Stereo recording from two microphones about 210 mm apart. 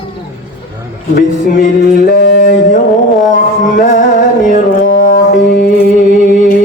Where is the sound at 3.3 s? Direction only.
40° left (ahead or behind).